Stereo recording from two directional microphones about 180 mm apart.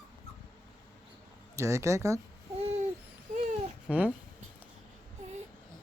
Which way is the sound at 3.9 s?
5° right (ahead or behind).